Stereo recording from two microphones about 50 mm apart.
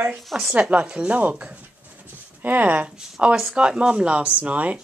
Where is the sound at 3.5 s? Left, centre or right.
Centre.